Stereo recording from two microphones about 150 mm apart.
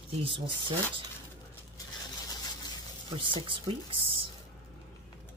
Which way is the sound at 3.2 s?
35° right (ahead or behind).